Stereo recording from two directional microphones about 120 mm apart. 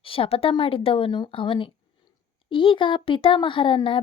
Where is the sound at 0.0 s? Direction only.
50° left (ahead or behind).